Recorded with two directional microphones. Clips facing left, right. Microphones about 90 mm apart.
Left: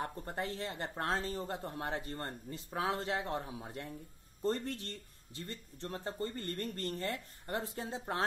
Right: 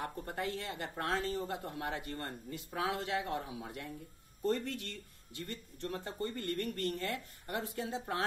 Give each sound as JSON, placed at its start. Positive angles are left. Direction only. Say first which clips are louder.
{"t": 0.0, "sound": "speech", "louder": "even", "side_deg": 30}